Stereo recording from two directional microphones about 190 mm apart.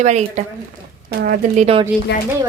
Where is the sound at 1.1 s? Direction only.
55° right (ahead or behind).